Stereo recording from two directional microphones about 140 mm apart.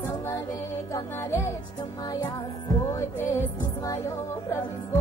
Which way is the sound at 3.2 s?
20° left (ahead or behind).